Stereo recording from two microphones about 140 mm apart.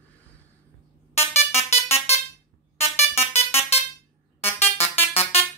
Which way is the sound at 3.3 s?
45° left (ahead or behind).